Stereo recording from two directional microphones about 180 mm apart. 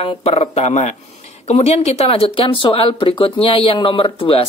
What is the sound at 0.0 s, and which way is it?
Speech, 35° left (ahead or behind).